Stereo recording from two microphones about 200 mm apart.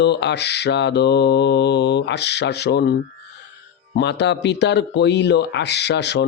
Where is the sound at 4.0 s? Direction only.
60° left (ahead or behind).